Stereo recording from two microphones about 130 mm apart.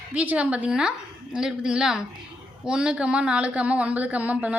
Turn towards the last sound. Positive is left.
turn(degrees=-10)  # may be behind; listen again after turning